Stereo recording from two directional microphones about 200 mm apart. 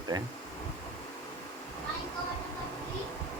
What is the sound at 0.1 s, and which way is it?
Speech, 20° right (ahead or behind).